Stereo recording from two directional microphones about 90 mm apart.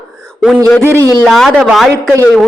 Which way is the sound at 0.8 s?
30° right (ahead or behind).